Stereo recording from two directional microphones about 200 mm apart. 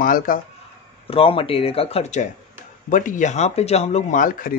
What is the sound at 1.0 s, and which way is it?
Speech, 25° left (ahead or behind).